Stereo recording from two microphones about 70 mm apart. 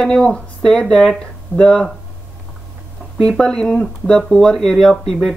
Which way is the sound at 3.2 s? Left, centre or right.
Centre.